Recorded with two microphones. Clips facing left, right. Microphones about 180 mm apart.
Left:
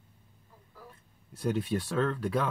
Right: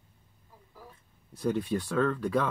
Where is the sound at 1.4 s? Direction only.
10° left (ahead or behind).